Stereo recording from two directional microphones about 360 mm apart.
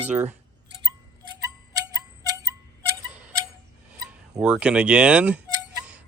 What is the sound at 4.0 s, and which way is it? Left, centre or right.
Speech, centre.